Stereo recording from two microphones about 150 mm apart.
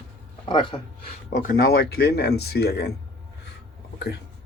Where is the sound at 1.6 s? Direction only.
90° left.